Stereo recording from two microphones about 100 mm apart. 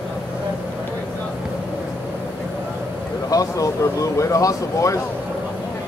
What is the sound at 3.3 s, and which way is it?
Speech, 35° left (ahead or behind).